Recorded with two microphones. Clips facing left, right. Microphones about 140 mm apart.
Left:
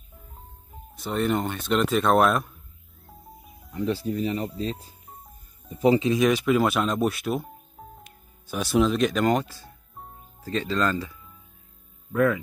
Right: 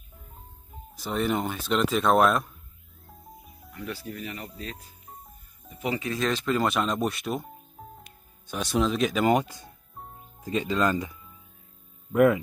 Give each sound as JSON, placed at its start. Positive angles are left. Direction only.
{"t": 0.9, "sound": "speech", "side_deg": 0}
{"t": 3.7, "sound": "speech", "side_deg": 25}